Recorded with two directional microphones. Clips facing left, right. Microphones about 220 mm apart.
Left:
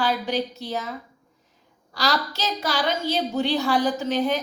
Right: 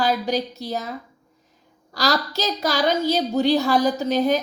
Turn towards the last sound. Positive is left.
turn(degrees=-40)  # may be behind; listen again after turning